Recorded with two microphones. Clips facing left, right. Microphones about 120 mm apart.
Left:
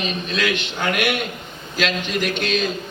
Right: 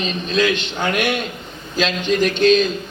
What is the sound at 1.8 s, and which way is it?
Speech, 25° right (ahead or behind).